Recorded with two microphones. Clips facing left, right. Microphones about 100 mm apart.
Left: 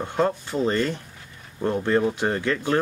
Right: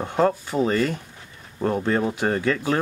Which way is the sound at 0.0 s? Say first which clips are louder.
Right 2 dB; 10° right (ahead or behind).